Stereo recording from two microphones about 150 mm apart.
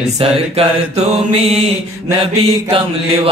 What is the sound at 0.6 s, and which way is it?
Mantra, 45° right (ahead or behind).